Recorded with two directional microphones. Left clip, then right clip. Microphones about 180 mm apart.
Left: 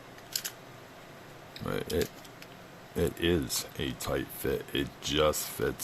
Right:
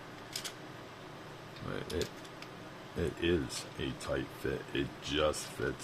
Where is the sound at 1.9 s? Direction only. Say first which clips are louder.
Left 6 dB; 50° left (ahead or behind).